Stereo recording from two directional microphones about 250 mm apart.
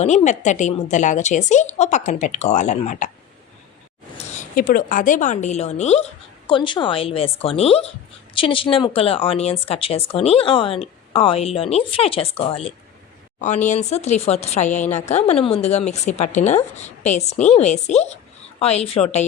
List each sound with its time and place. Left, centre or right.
0.0 s speech: left
4.4 s speech: left